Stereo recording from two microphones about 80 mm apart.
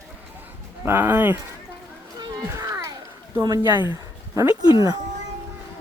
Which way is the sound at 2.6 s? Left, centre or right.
Right.